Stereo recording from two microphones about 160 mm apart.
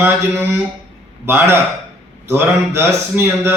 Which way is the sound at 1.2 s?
15° right (ahead or behind).